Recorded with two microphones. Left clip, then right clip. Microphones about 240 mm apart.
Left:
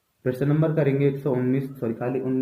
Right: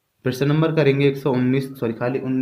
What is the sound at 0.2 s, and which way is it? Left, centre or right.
Speech, right.